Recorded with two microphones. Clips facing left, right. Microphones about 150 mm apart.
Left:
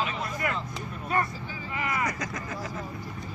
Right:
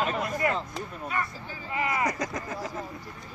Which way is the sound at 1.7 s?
25° right (ahead or behind).